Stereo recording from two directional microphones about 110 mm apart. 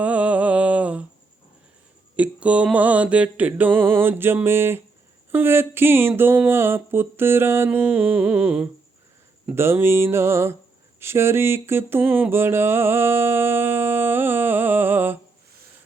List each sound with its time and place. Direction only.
0.0 s mantra: 10° right (ahead or behind)
2.1 s speech: 10° right (ahead or behind)
2.7 s music: 15° right (ahead or behind)
4.4 s a sound: 20° right (ahead or behind)